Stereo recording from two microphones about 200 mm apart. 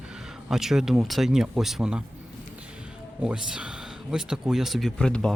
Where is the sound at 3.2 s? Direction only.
5° right (ahead or behind).